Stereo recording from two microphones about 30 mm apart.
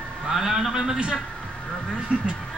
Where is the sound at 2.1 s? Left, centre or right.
Right.